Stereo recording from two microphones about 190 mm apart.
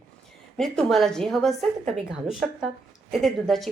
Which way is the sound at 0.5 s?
Centre (ahead or behind).